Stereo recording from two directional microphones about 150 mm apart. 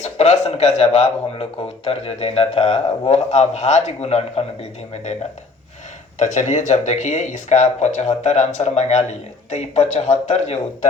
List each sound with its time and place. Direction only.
0.0 s speech: 50° left (ahead or behind)
6.1 s speech: 55° left (ahead or behind)